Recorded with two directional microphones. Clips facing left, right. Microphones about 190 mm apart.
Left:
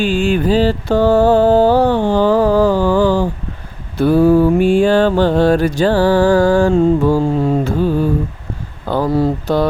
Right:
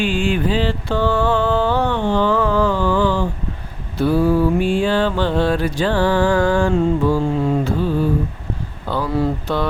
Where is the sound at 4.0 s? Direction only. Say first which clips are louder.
Left 5 dB; 50° left (ahead or behind).